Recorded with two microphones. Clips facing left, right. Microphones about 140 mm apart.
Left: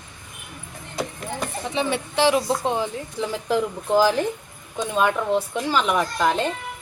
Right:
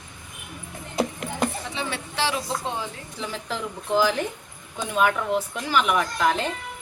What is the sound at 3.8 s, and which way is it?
Speech, 40° left (ahead or behind).